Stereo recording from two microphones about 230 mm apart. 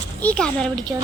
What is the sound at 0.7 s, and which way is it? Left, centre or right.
Speech, centre.